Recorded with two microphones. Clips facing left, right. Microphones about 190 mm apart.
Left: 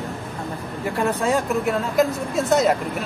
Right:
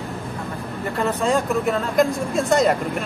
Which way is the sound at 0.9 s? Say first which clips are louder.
Right 1 dB; 10° left (ahead or behind).